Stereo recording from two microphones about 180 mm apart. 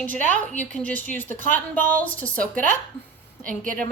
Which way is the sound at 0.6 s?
10° left (ahead or behind).